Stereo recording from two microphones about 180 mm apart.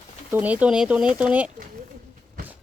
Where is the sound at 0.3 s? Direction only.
10° right (ahead or behind).